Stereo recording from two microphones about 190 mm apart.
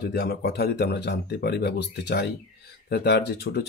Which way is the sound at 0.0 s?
55° left (ahead or behind).